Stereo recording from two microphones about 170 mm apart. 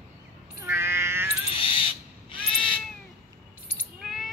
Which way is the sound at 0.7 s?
15° right (ahead or behind).